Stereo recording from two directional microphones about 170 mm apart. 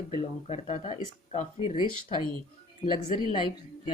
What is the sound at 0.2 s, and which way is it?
Speech, 40° left (ahead or behind).